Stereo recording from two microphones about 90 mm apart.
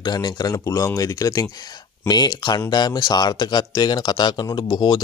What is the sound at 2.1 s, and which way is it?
Speech, 50° left (ahead or behind).